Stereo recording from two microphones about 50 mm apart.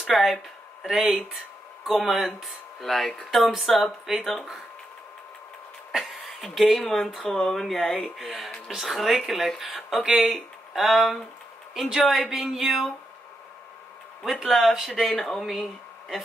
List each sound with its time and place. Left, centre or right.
0.0 s speech: centre
1.9 s speech: centre
5.9 s a sound: centre
6.8 s speech: centre
14.3 s speech: centre
15.0 s speech: centre